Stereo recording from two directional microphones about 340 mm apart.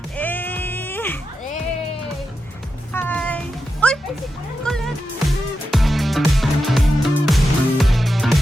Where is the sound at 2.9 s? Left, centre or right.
Centre.